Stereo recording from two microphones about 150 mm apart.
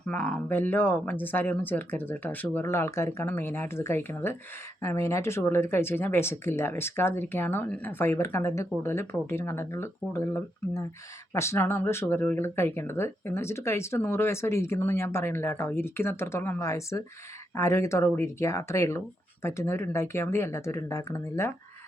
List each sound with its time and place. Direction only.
0.1 s speech: 10° left (ahead or behind)